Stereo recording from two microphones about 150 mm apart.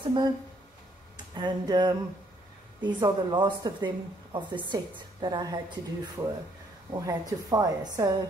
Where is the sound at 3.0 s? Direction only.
30° right (ahead or behind).